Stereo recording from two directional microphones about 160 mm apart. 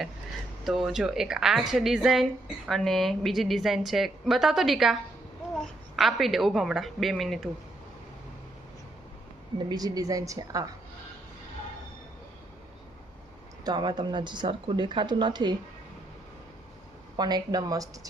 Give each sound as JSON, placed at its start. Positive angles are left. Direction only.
{"t": 0.6, "sound": "a woman's voice", "side_deg": 0}
{"t": 9.6, "sound": "speech", "side_deg": -25}
{"t": 13.7, "sound": "speech", "side_deg": -25}
{"t": 17.2, "sound": "speech", "side_deg": -25}